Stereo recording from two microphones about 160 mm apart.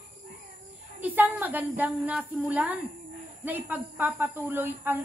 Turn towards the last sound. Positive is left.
turn(degrees=-10)  # may be behind; listen again after turning